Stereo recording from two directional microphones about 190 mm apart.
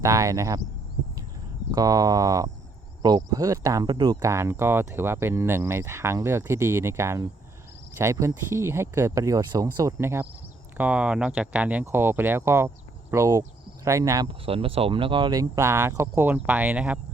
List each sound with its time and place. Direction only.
0.0 s speech: 15° right (ahead or behind)
1.7 s speech: 20° right (ahead or behind)
14.3 s speech: 30° right (ahead or behind); by 17.0 s 5° right (ahead or behind)